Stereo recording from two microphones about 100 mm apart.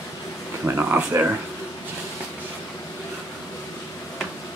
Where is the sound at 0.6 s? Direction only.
20° right (ahead or behind).